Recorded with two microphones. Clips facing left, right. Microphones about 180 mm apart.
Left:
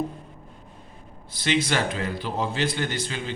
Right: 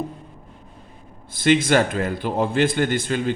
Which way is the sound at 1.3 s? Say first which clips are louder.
Right 7 dB; 50° right (ahead or behind).